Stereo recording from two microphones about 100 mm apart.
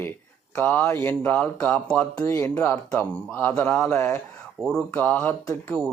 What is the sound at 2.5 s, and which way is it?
Speech, 15° left (ahead or behind).